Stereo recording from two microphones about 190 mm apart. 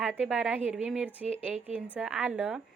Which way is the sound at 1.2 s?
35° right (ahead or behind).